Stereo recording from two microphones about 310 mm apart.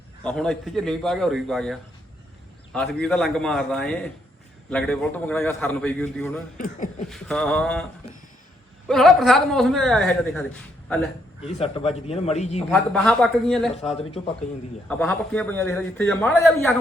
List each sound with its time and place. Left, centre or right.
0.3 s a man's voice: centre
8.9 s a man's voice: centre
11.4 s a man's voice: centre
12.5 s a man's voice: centre
13.8 s speech: centre
14.8 s a man's voice: centre